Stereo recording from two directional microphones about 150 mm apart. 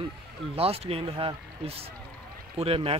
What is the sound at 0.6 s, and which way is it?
Speech, 40° right (ahead or behind).